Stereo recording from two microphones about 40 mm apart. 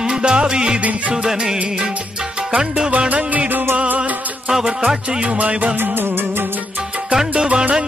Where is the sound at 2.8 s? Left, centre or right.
Right.